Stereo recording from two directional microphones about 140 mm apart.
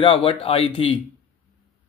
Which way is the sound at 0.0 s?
40° left (ahead or behind).